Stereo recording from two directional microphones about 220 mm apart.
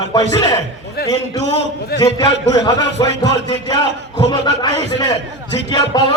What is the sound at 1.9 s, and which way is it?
Speech, 15° left (ahead or behind).